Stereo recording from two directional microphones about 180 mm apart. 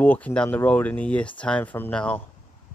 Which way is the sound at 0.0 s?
10° left (ahead or behind).